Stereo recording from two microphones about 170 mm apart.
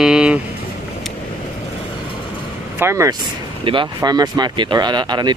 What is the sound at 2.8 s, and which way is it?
Speech, 15° right (ahead or behind).